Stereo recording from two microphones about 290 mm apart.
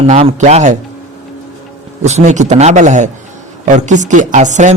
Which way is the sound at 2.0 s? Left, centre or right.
Right.